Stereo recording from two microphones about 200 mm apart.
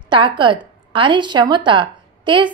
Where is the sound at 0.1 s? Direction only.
25° right (ahead or behind).